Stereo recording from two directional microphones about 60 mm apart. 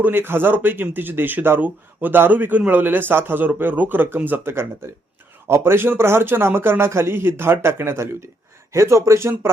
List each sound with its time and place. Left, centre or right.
0.0 s speech: right
5.5 s a man's voice: right
8.7 s speech: right